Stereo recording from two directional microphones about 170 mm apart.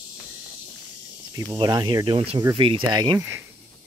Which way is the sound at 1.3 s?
20° right (ahead or behind).